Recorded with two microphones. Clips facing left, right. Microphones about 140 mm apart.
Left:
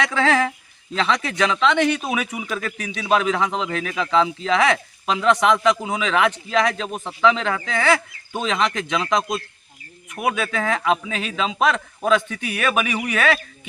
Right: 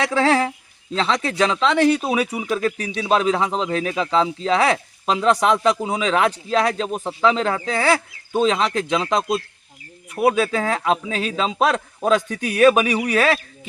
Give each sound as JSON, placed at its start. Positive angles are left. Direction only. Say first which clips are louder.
{"t": 0.0, "sound": "speech", "louder": "right 2 dB", "side_deg": -35}